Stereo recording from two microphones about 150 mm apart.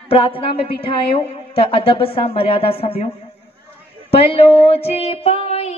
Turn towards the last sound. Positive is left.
turn(degrees=45)  # may be behind; listen again after turning